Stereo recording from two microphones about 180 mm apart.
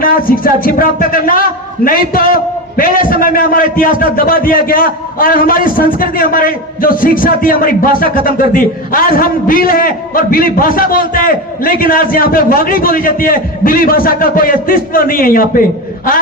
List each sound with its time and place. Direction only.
0.0 s a man's voice: 50° left (ahead or behind)